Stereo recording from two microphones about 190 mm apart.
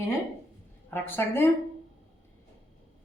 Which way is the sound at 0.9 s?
10° left (ahead or behind).